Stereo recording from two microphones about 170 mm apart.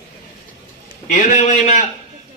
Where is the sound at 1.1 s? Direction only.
50° left (ahead or behind).